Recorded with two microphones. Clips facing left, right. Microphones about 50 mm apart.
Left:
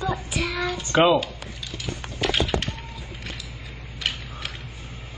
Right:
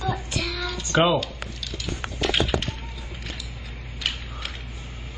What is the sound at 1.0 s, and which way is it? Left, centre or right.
Speech, centre.